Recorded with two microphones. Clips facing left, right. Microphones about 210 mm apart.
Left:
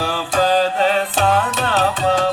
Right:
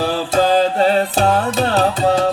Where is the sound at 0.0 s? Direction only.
35° right (ahead or behind).